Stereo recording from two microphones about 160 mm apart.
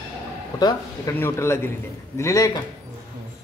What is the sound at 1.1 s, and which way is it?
A man's voice, 15° left (ahead or behind).